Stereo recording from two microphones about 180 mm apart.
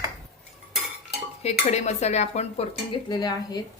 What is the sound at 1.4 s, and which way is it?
Speech, 40° left (ahead or behind).